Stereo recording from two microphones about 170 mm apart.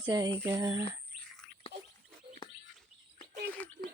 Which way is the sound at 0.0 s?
20° right (ahead or behind).